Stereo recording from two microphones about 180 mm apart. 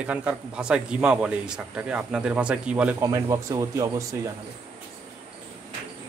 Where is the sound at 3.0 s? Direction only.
20° right (ahead or behind).